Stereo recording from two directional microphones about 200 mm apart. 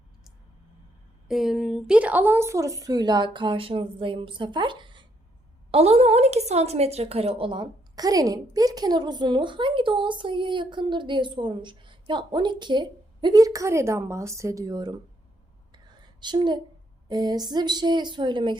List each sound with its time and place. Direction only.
1.3 s speech: centre (ahead or behind); by 15.0 s 20° right (ahead or behind)
16.2 s speech: 20° right (ahead or behind)